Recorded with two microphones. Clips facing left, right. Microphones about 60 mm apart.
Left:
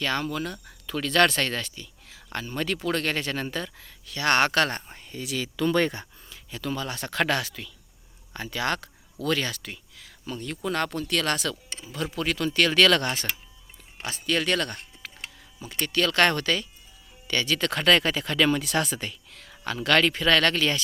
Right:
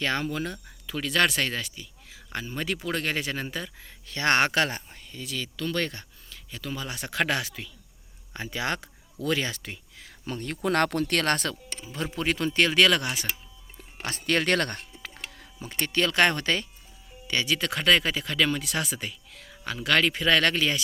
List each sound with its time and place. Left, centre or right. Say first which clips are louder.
0.0 s speech: even; right
0.9 s speech: left 3 dB; centre
3.8 s speech: even; right
4.9 s a sound: left 2 dB; centre
5.1 s speech: left 4 dB; centre
5.5 s speech: left 7 dB; centre
6.5 s speech: left 4 dB; centre; by 10.2 s right
10.2 s speech: right 2 dB; right
11.9 s speech: even; right
14.0 s speech: right 1 dB; right
15.5 s speech: left 1 dB; right
17.2 s speech: left 1 dB; centre